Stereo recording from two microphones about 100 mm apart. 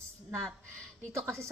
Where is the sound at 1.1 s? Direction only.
30° right (ahead or behind).